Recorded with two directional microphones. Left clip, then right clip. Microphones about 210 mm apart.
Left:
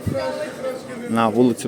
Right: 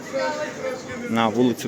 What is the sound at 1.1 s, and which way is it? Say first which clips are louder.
Speech: left 3 dB; 15° left (ahead or behind).